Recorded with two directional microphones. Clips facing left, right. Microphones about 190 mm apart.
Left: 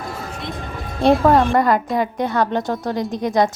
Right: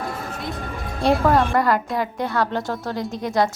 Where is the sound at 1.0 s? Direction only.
20° left (ahead or behind).